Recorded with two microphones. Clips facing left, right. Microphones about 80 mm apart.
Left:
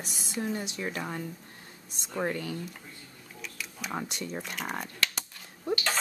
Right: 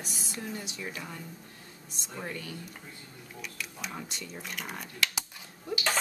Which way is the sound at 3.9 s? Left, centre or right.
Left.